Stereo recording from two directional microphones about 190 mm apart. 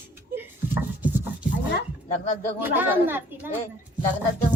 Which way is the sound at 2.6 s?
10° right (ahead or behind).